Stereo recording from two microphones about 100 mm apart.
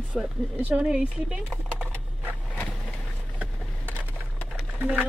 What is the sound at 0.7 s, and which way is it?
Speech, 10° right (ahead or behind).